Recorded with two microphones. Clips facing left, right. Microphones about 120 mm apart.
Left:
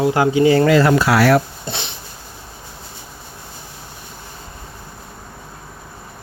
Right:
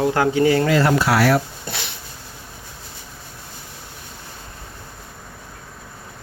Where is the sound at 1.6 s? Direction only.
25° left (ahead or behind).